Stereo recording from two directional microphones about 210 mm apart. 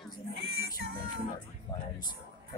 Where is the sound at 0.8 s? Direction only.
45° right (ahead or behind).